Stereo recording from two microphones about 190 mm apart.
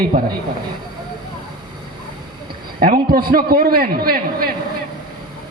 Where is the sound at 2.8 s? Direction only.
50° right (ahead or behind).